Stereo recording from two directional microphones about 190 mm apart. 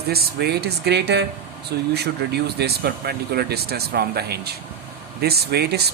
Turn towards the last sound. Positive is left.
turn(degrees=-60)  # may be behind; listen again after turning